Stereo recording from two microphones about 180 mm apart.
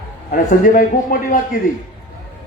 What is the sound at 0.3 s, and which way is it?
Speech, 50° left (ahead or behind).